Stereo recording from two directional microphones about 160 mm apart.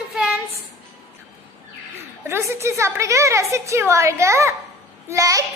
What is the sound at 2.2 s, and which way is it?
A woman's voice, 15° right (ahead or behind).